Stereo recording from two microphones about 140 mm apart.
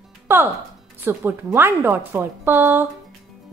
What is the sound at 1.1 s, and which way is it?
Speech, 15° right (ahead or behind).